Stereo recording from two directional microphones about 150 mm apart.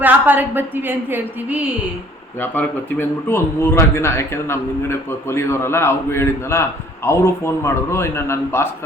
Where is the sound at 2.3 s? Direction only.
10° left (ahead or behind).